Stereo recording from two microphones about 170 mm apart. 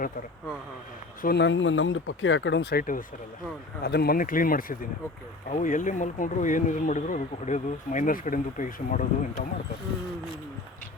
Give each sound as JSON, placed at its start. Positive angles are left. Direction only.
{"t": 1.2, "sound": "speech", "side_deg": 80}
{"t": 3.8, "sound": "speech", "side_deg": 65}